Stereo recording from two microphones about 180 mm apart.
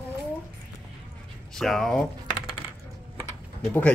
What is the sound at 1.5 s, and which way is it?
Speech, centre (ahead or behind).